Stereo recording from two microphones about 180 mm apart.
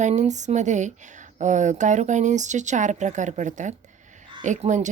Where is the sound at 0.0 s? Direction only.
40° right (ahead or behind).